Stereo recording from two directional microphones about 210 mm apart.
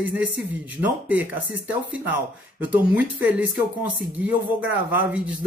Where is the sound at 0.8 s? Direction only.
5° right (ahead or behind).